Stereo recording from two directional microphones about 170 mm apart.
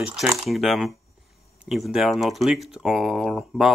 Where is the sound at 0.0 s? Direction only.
5° right (ahead or behind).